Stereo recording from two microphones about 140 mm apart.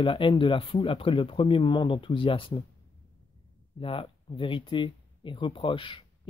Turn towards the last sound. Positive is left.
turn(degrees=40)  # may be behind; listen again after turning